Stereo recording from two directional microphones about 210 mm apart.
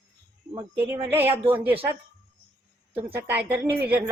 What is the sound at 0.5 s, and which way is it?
Speech, 10° right (ahead or behind).